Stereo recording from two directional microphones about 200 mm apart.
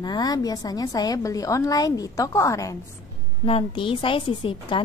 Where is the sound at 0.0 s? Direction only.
20° left (ahead or behind).